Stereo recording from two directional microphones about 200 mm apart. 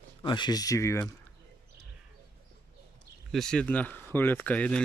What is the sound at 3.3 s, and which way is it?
Speech, 5° left (ahead or behind).